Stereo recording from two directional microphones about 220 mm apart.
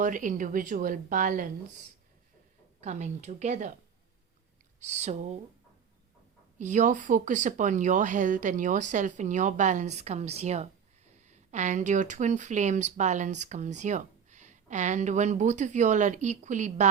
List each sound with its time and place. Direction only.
0.0 s speech: 35° right (ahead or behind)
2.8 s speech: 30° right (ahead or behind)
4.8 s speech: 30° right (ahead or behind)
6.6 s speech: 35° right (ahead or behind)